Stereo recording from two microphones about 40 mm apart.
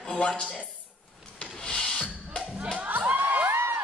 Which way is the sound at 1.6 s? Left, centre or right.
Left.